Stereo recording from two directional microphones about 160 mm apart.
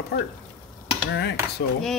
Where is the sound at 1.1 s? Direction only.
90° left.